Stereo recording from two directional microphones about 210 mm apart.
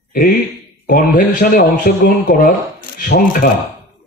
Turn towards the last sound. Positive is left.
turn(degrees=45)  # may be behind; listen again after turning